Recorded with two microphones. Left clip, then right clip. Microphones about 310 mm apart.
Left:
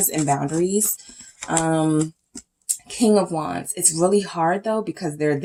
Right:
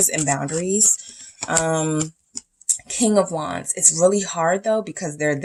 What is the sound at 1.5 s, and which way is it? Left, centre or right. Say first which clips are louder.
Speech: even; right.